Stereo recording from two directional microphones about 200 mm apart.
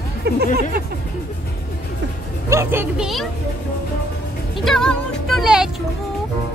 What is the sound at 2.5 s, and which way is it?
Speech, 10° right (ahead or behind).